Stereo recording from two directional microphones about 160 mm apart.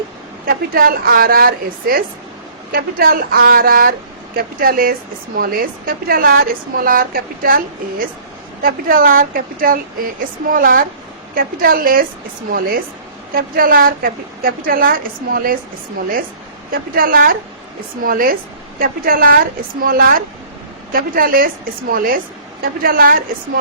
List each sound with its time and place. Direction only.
0.4 s a woman's voice: 65° right (ahead or behind)
13.3 s a woman's voice: 65° right (ahead or behind)
16.7 s a woman's voice: 65° right (ahead or behind)